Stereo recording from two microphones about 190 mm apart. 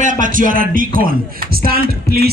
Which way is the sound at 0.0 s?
45° right (ahead or behind).